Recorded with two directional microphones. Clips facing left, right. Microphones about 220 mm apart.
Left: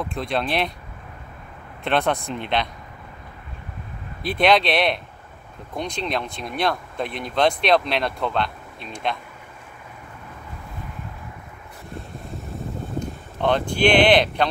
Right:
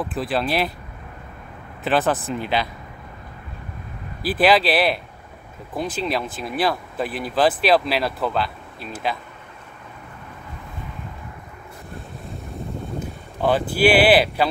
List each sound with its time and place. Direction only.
0.0 s speech: 5° right (ahead or behind)
1.9 s speech: 5° right (ahead or behind)
4.2 s speech: 5° right (ahead or behind)
13.0 s speech: 5° right (ahead or behind)